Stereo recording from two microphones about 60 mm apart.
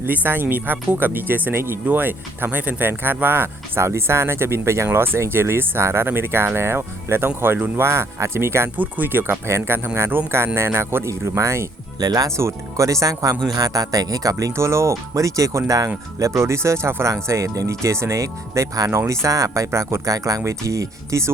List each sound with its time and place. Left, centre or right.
0.0 s speech: right
4.9 s speech: right
8.7 s speech: right
11.2 s speech: right
11.9 s speech: right
12.4 s speech: right
13.5 s speech: right
14.5 s speech: right
16.1 s speech: right
17.8 s speech: right
18.9 s speech: right
20.4 s speech: right